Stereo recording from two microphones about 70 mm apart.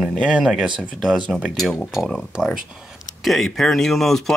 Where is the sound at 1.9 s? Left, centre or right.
Centre.